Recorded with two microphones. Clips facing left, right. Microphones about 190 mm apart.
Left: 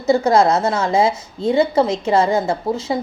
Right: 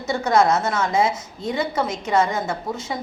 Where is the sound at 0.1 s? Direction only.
30° left (ahead or behind).